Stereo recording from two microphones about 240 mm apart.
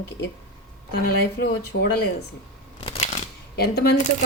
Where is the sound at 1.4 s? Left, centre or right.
Left.